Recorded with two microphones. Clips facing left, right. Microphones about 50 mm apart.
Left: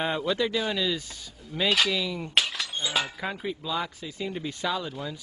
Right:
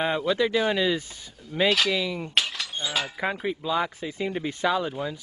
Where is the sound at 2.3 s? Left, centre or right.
Centre.